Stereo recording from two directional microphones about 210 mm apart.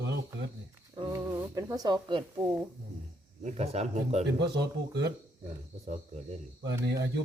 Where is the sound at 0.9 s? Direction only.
20° right (ahead or behind).